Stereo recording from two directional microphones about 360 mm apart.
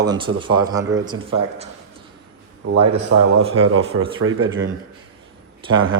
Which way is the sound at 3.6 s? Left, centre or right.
Right.